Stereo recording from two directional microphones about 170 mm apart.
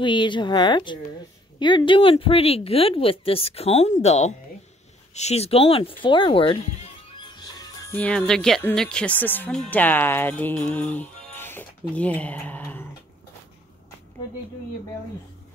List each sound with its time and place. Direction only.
0.0 s speech: 25° left (ahead or behind)
7.3 s music: 20° left (ahead or behind)
7.9 s speech: 10° left (ahead or behind)